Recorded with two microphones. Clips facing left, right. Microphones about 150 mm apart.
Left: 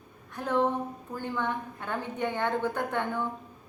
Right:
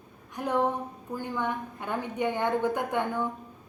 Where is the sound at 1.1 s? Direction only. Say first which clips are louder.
Right 1 dB; 15° right (ahead or behind).